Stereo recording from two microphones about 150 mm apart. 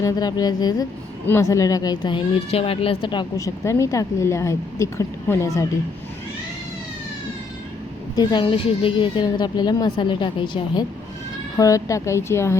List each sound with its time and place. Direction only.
0.0 s speech: 25° left (ahead or behind)
8.1 s speech: 30° left (ahead or behind)